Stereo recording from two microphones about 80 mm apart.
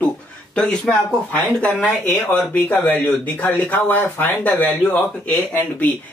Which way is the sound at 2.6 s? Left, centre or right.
Left.